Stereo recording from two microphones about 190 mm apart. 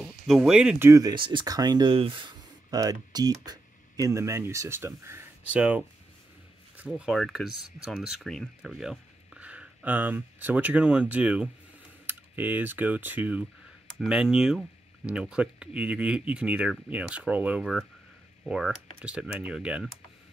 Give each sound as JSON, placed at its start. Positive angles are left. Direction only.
{"t": 0.0, "sound": "speech", "side_deg": 0}